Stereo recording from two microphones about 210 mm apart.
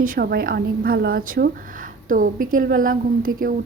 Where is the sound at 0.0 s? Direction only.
45° right (ahead or behind).